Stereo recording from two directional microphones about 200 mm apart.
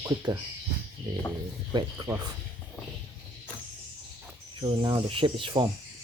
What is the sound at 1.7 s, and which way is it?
Speech, 20° right (ahead or behind).